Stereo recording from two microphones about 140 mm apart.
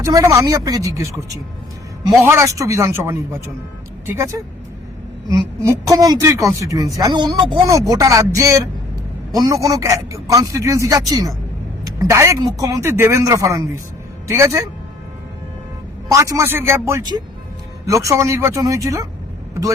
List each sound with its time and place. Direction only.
0.0 s a man's voice: 25° right (ahead or behind)
2.2 s a man's voice: 20° right (ahead or behind)
5.6 s a man's voice: 25° right (ahead or behind)
7.7 s a man's voice: 25° right (ahead or behind)
16.0 s a man's voice: 20° right (ahead or behind)
17.0 s a man's voice: 30° right (ahead or behind)